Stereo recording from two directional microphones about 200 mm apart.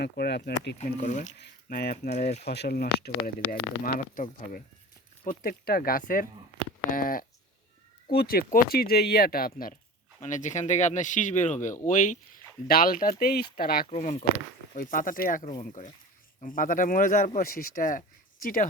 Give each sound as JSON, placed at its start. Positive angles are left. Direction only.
{"t": 0.0, "sound": "speech", "side_deg": 55}
{"t": 0.8, "sound": "speech", "side_deg": 40}
{"t": 1.4, "sound": "speech", "side_deg": 50}
{"t": 2.0, "sound": "speech", "side_deg": 35}
{"t": 2.4, "sound": "speech", "side_deg": 55}
{"t": 13.9, "sound": "speech", "side_deg": 35}